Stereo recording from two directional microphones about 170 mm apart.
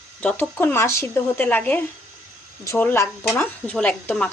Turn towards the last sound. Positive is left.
turn(degrees=10)  # may be behind; listen again after turning